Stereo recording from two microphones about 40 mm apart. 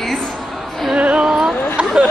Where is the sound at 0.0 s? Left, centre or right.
Centre.